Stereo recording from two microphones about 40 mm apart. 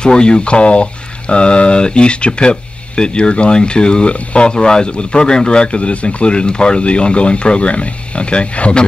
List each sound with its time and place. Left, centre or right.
0.0 s speech: left
4.6 s speech: centre